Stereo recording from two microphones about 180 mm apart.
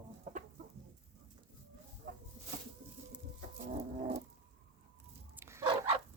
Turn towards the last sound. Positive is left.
turn(degrees=-25)  # may be behind; listen again after turning